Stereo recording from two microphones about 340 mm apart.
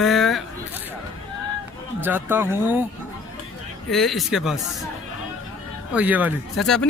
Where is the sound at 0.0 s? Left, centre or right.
Centre.